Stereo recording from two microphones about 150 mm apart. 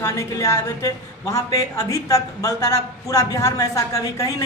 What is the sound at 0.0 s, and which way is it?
A woman's voice, 20° left (ahead or behind).